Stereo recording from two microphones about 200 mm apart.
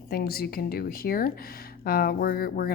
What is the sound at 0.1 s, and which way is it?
Speech, 50° left (ahead or behind).